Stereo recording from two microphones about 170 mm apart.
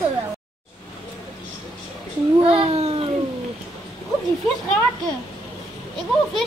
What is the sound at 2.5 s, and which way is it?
Speech, 35° right (ahead or behind).